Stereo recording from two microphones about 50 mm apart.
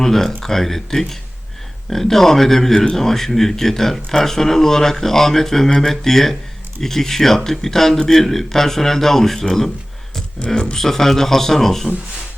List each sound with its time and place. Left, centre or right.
0.0 s a man's voice: centre
10.4 s speech: centre
10.8 s speech: centre